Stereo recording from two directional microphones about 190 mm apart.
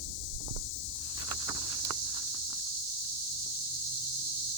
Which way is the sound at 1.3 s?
20° right (ahead or behind).